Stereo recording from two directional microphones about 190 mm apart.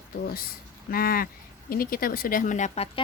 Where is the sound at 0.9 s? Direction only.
50° left (ahead or behind).